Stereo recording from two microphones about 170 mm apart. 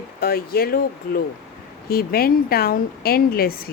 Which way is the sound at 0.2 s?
65° left (ahead or behind).